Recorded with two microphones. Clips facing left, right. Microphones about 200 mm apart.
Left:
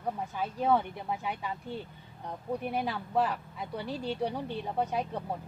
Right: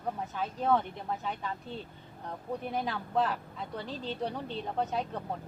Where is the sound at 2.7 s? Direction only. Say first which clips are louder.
Even; 10° left (ahead or behind).